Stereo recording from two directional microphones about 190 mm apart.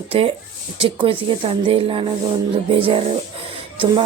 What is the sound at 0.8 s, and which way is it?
A woman's voice, 30° right (ahead or behind).